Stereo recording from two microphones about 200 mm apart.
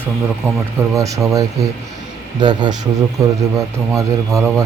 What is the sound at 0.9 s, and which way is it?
Speech, 15° right (ahead or behind).